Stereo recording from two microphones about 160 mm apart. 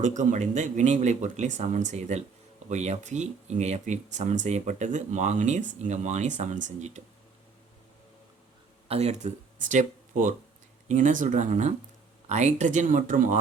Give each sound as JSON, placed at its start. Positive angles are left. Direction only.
{"t": 0.0, "sound": "speech", "side_deg": -50}
{"t": 8.9, "sound": "speech", "side_deg": -40}